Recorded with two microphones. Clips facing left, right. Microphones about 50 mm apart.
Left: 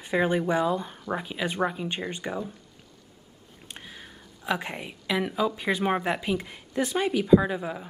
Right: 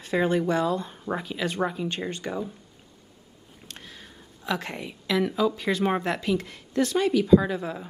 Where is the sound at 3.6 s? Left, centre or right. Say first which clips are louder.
Left 1 dB; centre.